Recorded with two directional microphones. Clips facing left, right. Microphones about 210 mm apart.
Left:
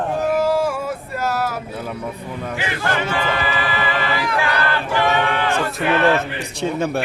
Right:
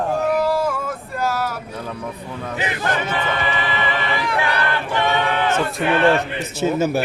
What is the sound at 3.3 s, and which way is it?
Choir, 20° right (ahead or behind).